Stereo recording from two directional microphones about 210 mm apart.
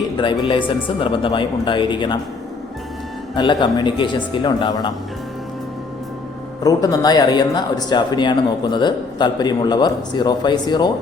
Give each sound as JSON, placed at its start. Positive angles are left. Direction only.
{"t": 0.2, "sound": "speech", "side_deg": 25}
{"t": 3.3, "sound": "speech", "side_deg": 20}
{"t": 6.6, "sound": "speech", "side_deg": 15}